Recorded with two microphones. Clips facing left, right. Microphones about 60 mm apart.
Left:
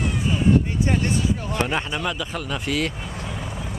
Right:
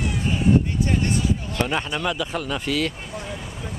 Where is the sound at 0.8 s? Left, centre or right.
Left.